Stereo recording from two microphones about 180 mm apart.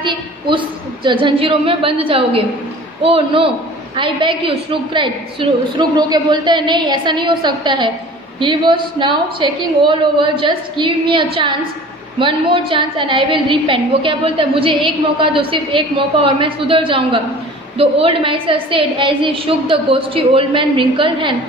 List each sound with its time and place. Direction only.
0.0 s a woman's voice: 25° right (ahead or behind)